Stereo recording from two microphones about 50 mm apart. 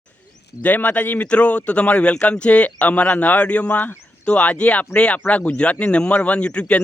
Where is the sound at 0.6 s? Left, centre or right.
Left.